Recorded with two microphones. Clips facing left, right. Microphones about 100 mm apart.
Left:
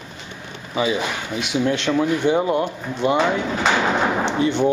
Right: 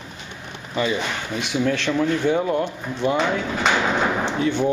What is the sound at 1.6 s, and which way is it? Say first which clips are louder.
Speech: left 1 dB; 20° left (ahead or behind).